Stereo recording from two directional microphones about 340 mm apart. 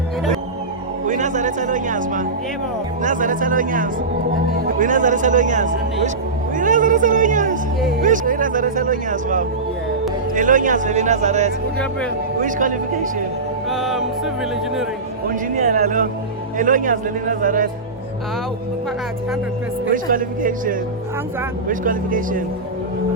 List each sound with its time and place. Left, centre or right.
1.0 s speech: right
13.7 s music: centre
15.3 s speech: right
19.8 s speech: right